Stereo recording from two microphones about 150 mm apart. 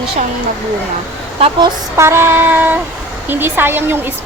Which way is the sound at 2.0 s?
15° right (ahead or behind).